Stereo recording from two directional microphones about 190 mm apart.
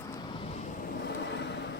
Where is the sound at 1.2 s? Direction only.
65° left (ahead or behind).